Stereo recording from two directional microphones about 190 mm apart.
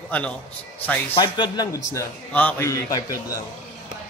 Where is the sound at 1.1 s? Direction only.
25° left (ahead or behind).